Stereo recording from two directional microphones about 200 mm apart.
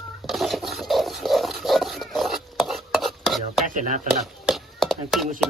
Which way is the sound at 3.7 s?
40° right (ahead or behind).